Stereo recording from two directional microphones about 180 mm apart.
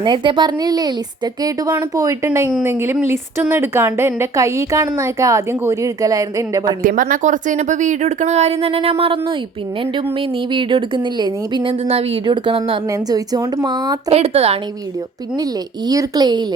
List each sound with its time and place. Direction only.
0.0 s a woman's voice: 25° right (ahead or behind)
6.8 s speech: 50° right (ahead or behind); by 14.0 s 20° right (ahead or behind)
14.1 s speech: 35° right (ahead or behind)
15.9 s speech: 20° right (ahead or behind)